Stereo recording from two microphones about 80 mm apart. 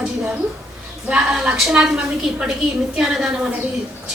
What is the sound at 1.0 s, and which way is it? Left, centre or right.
Speech, centre.